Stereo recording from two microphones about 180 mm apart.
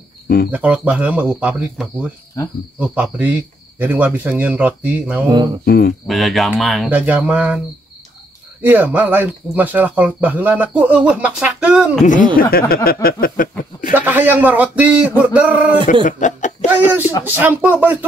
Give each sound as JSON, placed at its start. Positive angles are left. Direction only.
{"t": 0.5, "sound": "speech", "side_deg": -10}
{"t": 5.3, "sound": "cricket", "side_deg": -25}
{"t": 5.7, "sound": "speech", "side_deg": 55}
{"t": 6.0, "sound": "speech", "side_deg": 0}
{"t": 8.6, "sound": "speech", "side_deg": -10}
{"t": 12.4, "sound": "speech", "side_deg": 55}
{"t": 13.9, "sound": "speech", "side_deg": -10}
{"t": 16.1, "sound": "speech", "side_deg": 45}
{"t": 16.7, "sound": "speech", "side_deg": -10}